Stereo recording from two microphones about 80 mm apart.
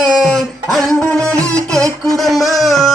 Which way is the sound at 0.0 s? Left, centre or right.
Centre.